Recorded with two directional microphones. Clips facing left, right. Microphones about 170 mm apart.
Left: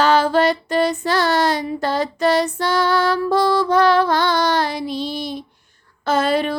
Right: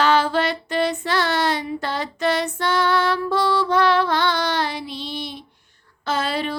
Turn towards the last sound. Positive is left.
turn(degrees=50)  # may be behind; listen again after turning